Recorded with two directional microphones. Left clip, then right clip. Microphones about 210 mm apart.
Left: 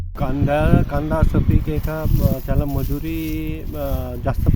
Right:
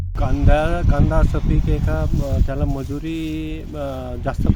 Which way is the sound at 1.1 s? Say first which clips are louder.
Left 1 dB; centre (ahead or behind).